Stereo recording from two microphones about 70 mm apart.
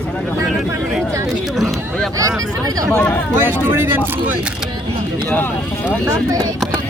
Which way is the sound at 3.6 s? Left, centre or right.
Right.